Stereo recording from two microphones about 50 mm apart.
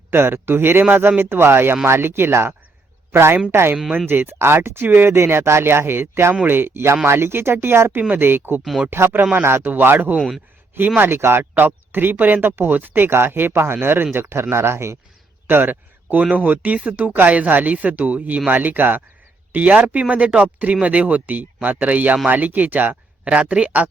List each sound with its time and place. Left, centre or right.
0.1 s speech: right
4.1 s speech: right
4.4 s speech: right
10.2 s speech: centre
11.0 s speech: right
11.5 s speech: right
15.4 s a sound: right
16.2 s speech: right
19.5 s speech: right